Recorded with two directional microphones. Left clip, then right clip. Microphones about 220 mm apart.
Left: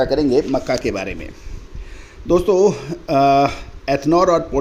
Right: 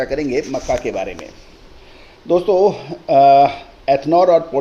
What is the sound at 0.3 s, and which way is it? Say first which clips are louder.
A man's voice: left 2 dB; 35° left (ahead or behind).